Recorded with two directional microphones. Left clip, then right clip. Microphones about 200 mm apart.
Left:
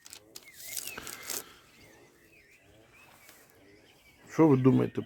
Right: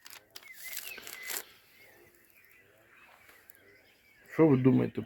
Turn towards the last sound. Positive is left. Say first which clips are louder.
# left 2 dB
turn(degrees=5)  # may be behind; listen again after turning